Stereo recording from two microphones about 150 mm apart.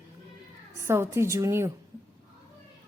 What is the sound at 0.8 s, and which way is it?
Speech, 15° right (ahead or behind).